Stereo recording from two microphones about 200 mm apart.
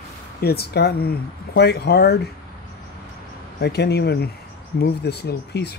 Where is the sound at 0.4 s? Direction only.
50° left (ahead or behind).